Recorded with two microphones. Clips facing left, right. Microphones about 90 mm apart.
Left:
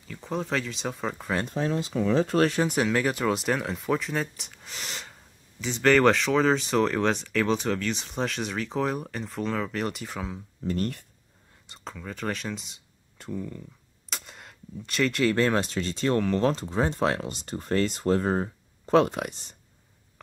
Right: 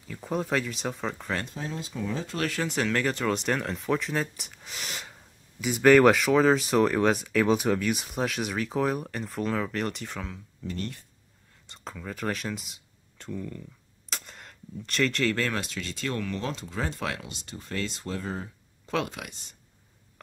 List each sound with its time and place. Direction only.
0.1 s speech: 5° right (ahead or behind)
1.5 s speech: 60° left (ahead or behind)
2.3 s speech: 25° left (ahead or behind); by 10.3 s 5° left (ahead or behind)
10.6 s speech: 45° left (ahead or behind)
11.7 s speech: centre (ahead or behind)
13.2 s speech: 10° left (ahead or behind)
14.0 s gunshot: centre (ahead or behind)
15.3 s speech: 30° left (ahead or behind)
16.7 s speech: 30° left (ahead or behind)